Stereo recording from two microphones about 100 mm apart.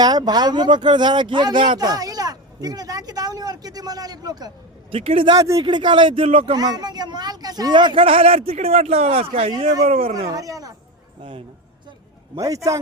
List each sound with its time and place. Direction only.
0.0 s speech: 45° right (ahead or behind)
1.8 s speech: 40° right (ahead or behind)
4.9 s speech: 65° right (ahead or behind)
5.3 s speech: 35° right (ahead or behind)
5.6 s speech: 50° right (ahead or behind)
6.2 s speech: 70° right (ahead or behind)
6.5 s speech: 45° right (ahead or behind); by 9.5 s 90° right
10.2 s speech: 35° right (ahead or behind)
11.2 s speech: 60° right (ahead or behind)
12.4 s speech: 35° right (ahead or behind)